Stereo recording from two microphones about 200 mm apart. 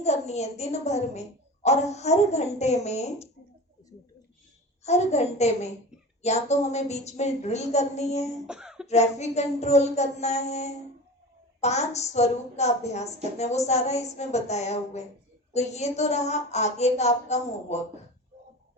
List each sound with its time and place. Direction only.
0.0 s a woman's voice: 35° left (ahead or behind)
4.8 s a woman's voice: 35° left (ahead or behind)
8.4 s speech: 5° right (ahead or behind)
8.9 s a woman's voice: 35° left (ahead or behind)